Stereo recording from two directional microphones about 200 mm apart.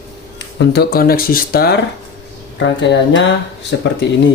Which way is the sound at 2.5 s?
65° left (ahead or behind).